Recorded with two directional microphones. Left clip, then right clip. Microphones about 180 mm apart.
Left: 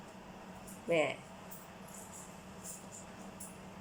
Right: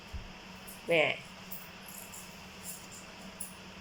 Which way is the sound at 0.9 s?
Centre (ahead or behind).